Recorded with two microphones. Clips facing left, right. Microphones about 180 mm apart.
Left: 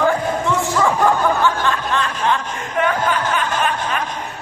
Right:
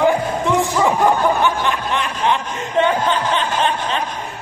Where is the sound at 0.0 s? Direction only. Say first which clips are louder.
Right 1 dB; 15° right (ahead or behind).